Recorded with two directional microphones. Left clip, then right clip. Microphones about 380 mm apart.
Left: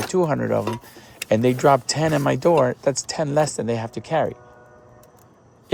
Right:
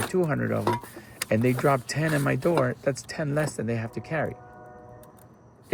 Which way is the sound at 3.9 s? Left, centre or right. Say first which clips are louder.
Left 4 dB; left.